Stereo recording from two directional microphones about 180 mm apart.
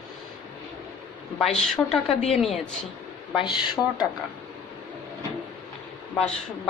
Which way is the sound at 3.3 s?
25° left (ahead or behind).